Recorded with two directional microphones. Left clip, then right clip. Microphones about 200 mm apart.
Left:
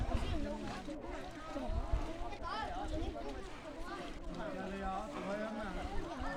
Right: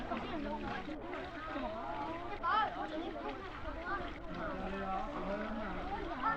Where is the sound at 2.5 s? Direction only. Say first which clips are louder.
Right 10 dB; 80° left.